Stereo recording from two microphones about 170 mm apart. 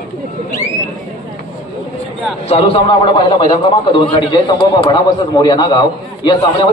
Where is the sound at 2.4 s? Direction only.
35° left (ahead or behind).